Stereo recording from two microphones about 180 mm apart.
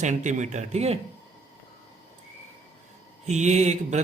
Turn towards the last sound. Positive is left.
turn(degrees=-40)  # may be behind; listen again after turning